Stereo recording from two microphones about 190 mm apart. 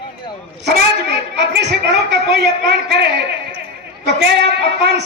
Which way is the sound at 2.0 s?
60° right (ahead or behind).